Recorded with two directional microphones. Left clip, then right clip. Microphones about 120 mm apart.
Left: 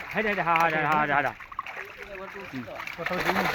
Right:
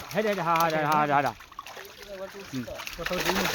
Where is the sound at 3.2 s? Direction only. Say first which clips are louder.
Left 2 dB; 10° left (ahead or behind).